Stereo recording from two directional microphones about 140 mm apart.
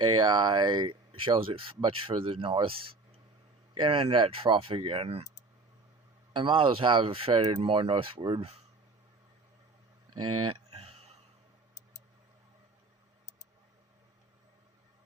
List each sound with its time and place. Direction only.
0.0 s speech: 35° right (ahead or behind)
6.3 s speech: 35° right (ahead or behind)
10.5 s a sound: 45° right (ahead or behind)